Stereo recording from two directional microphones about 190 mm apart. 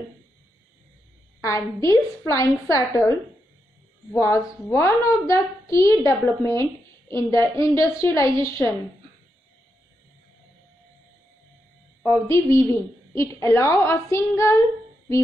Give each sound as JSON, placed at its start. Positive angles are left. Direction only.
{"t": 1.4, "sound": "a woman's voice", "side_deg": 15}
{"t": 12.3, "sound": "a woman's voice", "side_deg": 15}